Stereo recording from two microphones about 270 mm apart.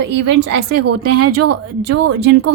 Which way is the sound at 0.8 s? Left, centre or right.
Right.